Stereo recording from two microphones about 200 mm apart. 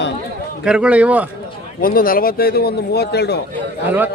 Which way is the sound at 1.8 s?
45° left (ahead or behind).